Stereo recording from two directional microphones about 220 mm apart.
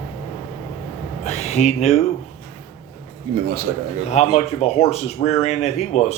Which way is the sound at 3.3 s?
45° right (ahead or behind).